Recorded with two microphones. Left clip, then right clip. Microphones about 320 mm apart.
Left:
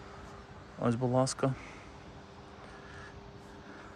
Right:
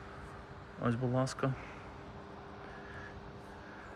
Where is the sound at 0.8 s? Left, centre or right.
Centre.